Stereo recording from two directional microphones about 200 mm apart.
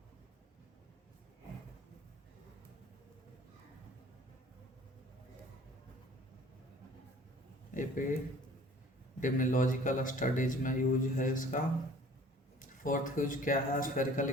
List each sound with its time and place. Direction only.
7.7 s speech: 40° left (ahead or behind)
9.2 s speech: 40° left (ahead or behind)